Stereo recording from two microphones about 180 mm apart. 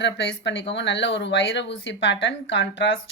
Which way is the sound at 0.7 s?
75° left (ahead or behind).